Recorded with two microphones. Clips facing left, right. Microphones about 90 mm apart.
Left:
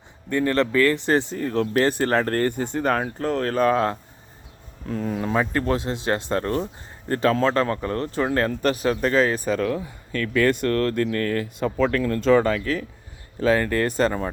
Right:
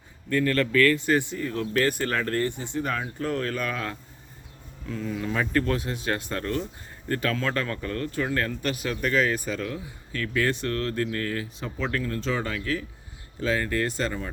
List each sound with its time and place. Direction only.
0.3 s speech: 20° left (ahead or behind); by 5.3 s 45° left (ahead or behind)
5.3 s speech: 30° left (ahead or behind)
9.6 s speech: 55° left (ahead or behind)